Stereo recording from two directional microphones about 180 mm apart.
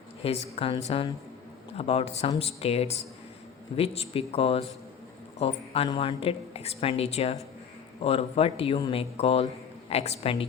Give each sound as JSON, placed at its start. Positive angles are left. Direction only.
{"t": 0.2, "sound": "a woman's voice", "side_deg": 35}